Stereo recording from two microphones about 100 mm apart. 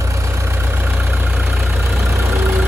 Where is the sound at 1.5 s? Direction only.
Centre (ahead or behind).